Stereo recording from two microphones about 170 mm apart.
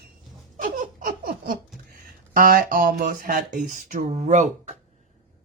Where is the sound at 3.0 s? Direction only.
60° right (ahead or behind).